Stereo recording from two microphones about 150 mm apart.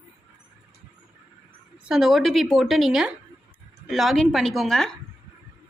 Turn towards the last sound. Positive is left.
turn(degrees=0)  # may be behind; listen again after turning